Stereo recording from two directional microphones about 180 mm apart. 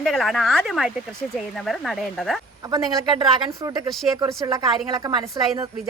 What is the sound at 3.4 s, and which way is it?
A woman's voice, 20° right (ahead or behind).